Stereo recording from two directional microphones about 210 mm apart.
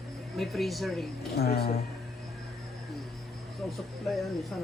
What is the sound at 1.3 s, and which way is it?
Speech, 50° left (ahead or behind).